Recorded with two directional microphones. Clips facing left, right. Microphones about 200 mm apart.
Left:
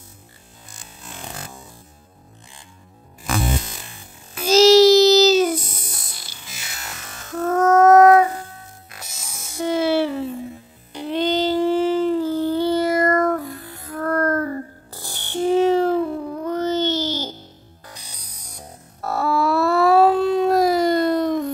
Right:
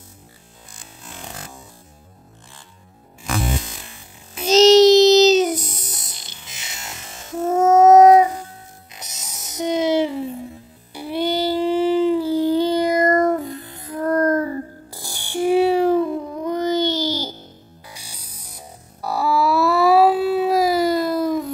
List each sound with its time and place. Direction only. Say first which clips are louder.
4.4 s music: right 1 dB; 20° right (ahead or behind)
7.4 s a sound: right 1 dB; 25° right (ahead or behind)
8.9 s music: even; 20° right (ahead or behind)
16.4 s baby cry: right 1 dB; 15° right (ahead or behind)
17.8 s music: left 1 dB; 10° right (ahead or behind)